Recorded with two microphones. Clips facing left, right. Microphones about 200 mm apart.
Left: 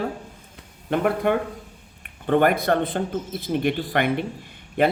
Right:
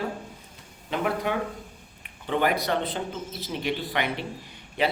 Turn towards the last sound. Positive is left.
turn(degrees=55)  # may be behind; listen again after turning